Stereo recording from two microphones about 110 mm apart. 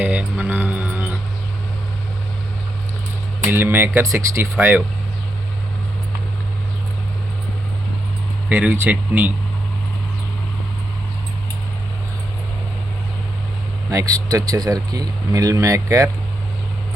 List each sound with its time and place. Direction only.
0.0 s music: 10° right (ahead or behind)
3.5 s speech: 20° right (ahead or behind)
8.4 s speech: 15° right (ahead or behind)
13.9 s speech: 30° right (ahead or behind)